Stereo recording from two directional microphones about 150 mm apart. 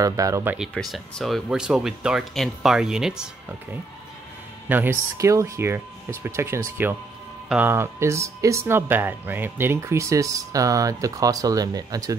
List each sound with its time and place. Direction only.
0.0 s speech: 25° right (ahead or behind)
0.6 s speech: centre (ahead or behind)
4.6 s speech: 15° right (ahead or behind)